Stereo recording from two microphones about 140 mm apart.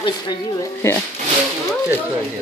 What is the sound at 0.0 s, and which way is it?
Speech, 25° left (ahead or behind).